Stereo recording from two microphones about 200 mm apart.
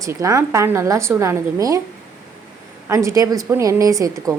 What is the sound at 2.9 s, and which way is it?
A woman's voice, 15° right (ahead or behind).